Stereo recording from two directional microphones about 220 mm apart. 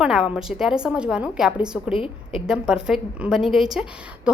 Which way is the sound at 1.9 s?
25° left (ahead or behind).